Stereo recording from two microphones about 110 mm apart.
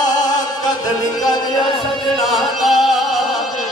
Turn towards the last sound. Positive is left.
turn(degrees=0)  # may be behind; listen again after turning